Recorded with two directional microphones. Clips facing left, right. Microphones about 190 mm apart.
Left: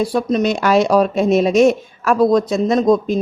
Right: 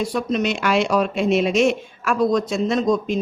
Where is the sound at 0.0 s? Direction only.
35° left (ahead or behind).